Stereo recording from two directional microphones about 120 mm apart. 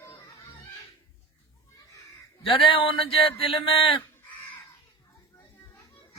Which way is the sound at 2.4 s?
45° left (ahead or behind).